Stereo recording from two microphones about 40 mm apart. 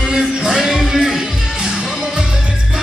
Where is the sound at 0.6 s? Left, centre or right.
Centre.